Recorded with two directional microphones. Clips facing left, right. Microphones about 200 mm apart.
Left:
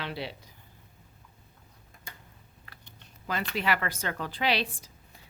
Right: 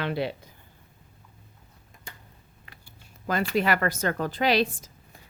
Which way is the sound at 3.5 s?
45° right (ahead or behind).